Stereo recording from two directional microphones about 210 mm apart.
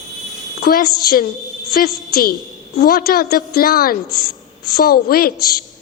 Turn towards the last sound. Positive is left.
turn(degrees=45)  # may be behind; listen again after turning